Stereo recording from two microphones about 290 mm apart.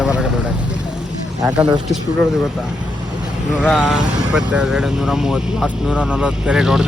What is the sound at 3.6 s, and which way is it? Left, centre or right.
Speech, centre.